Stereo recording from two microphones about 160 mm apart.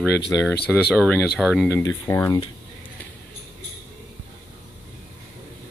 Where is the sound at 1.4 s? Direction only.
5° right (ahead or behind).